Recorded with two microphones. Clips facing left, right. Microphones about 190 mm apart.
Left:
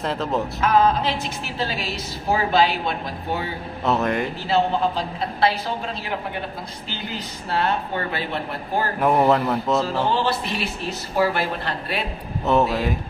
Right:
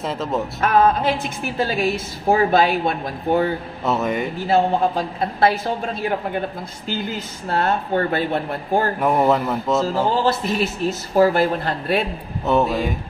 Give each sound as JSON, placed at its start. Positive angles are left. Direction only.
{"t": 0.0, "sound": "speech", "side_deg": 0}
{"t": 0.6, "sound": "a woman's voice", "side_deg": -50}
{"t": 3.8, "sound": "speech", "side_deg": 0}
{"t": 4.4, "sound": "a woman's voice", "side_deg": -45}
{"t": 7.4, "sound": "a woman's voice", "side_deg": -45}
{"t": 9.0, "sound": "speech", "side_deg": 0}
{"t": 10.1, "sound": "a woman's voice", "side_deg": -45}
{"t": 12.4, "sound": "speech", "side_deg": 0}